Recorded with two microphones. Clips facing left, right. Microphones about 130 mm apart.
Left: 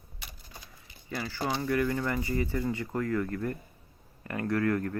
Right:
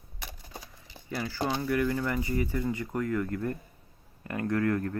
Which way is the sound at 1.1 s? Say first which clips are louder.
Right 2 dB; centre (ahead or behind).